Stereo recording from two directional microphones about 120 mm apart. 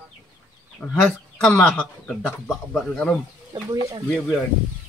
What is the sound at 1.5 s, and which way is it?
Speech, 10° left (ahead or behind).